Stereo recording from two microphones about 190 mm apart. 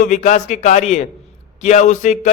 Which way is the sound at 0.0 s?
40° left (ahead or behind).